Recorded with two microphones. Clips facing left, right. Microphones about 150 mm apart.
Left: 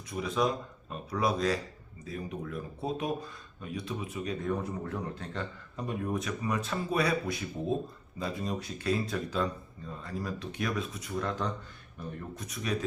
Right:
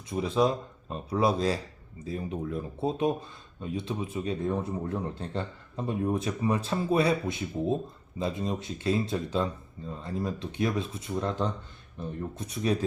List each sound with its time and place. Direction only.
0.1 s speech: 30° right (ahead or behind)